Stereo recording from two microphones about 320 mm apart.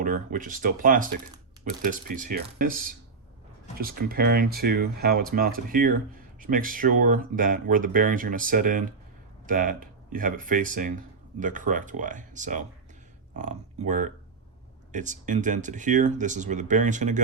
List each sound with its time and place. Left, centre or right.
0.0 s speech: right